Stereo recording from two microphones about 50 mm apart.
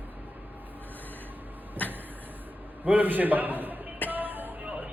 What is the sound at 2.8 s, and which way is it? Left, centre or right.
Speech, right.